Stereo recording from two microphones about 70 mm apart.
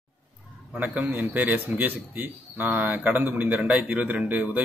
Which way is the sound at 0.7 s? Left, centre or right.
Right.